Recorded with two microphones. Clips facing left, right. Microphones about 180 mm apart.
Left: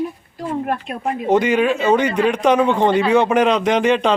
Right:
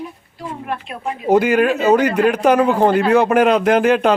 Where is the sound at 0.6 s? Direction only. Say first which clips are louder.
Left 3 dB; 45° left (ahead or behind).